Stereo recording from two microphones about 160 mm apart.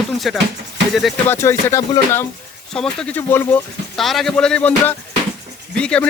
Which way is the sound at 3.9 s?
Centre (ahead or behind).